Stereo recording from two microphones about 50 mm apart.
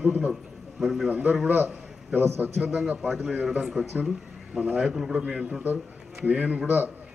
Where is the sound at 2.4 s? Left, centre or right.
Right.